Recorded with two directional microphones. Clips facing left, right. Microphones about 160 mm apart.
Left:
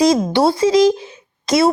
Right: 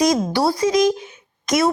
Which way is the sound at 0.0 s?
25° left (ahead or behind).